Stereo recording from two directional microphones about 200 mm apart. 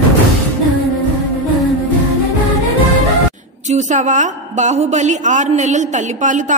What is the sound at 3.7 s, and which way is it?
A woman's voice, 35° right (ahead or behind).